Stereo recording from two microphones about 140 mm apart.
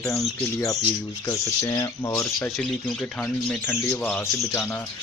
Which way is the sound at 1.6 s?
25° left (ahead or behind).